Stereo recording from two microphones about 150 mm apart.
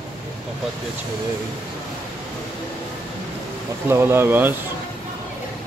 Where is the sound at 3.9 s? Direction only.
15° right (ahead or behind).